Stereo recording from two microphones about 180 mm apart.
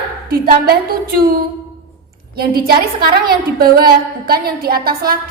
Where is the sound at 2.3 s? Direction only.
55° right (ahead or behind).